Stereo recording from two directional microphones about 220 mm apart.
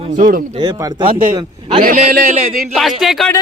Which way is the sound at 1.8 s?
35° right (ahead or behind).